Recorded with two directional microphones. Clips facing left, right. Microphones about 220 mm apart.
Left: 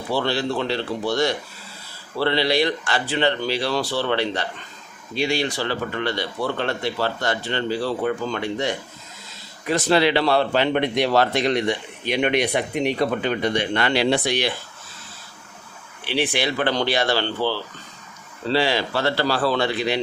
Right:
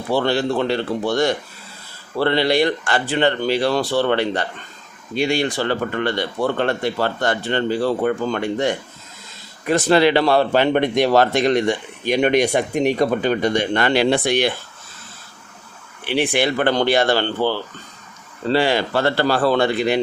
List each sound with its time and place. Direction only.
0.1 s speech: 55° right (ahead or behind)
16.0 s speech: 55° right (ahead or behind)